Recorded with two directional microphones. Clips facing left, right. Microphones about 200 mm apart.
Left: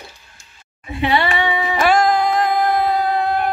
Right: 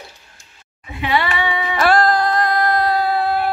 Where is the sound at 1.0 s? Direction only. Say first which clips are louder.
Left 2 dB; 30° left (ahead or behind).